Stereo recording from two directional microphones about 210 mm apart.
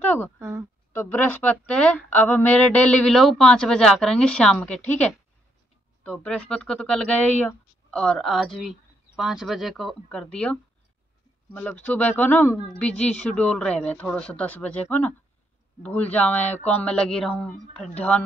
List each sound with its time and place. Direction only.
0.0 s a sound: 10° left (ahead or behind)
0.4 s speech: 10° right (ahead or behind)
0.9 s speech: 10° left (ahead or behind)
6.0 s speech: 5° left (ahead or behind)